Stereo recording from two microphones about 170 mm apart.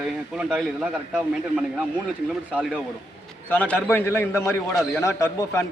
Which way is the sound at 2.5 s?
5° right (ahead or behind).